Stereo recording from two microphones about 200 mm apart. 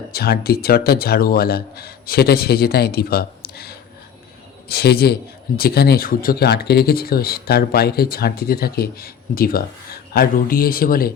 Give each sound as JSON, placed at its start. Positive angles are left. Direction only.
{"t": 0.1, "sound": "speech", "side_deg": 50}